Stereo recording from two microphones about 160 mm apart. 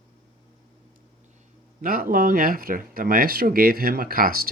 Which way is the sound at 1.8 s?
60° right (ahead or behind).